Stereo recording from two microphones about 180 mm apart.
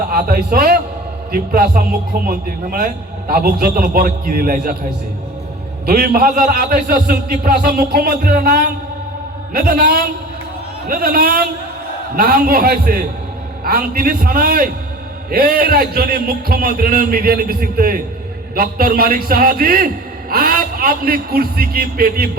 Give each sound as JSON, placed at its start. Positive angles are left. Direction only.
{"t": 0.1, "sound": "a man's voice", "side_deg": -55}
{"t": 5.8, "sound": "a man's voice", "side_deg": -55}